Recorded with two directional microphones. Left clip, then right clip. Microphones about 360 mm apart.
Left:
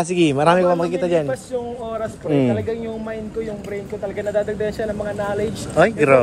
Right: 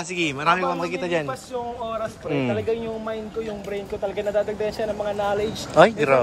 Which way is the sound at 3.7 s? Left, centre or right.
Centre.